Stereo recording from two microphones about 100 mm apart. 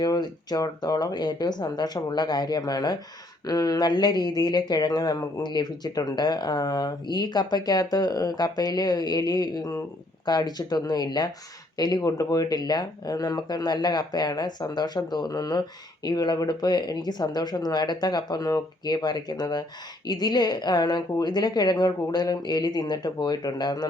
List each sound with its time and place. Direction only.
0.0 s speech: 40° left (ahead or behind)